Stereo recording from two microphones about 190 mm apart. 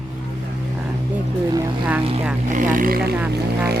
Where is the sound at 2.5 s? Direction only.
45° right (ahead or behind).